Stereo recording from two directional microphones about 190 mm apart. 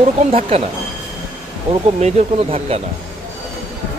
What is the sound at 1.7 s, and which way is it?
Speech, 35° right (ahead or behind).